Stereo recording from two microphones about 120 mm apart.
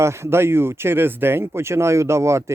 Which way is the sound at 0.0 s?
20° right (ahead or behind).